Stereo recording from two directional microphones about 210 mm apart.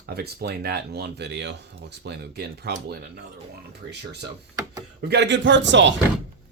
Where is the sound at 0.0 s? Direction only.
50° right (ahead or behind).